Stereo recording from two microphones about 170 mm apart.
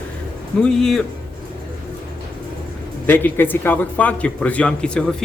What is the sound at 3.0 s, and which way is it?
A man's voice, 10° left (ahead or behind).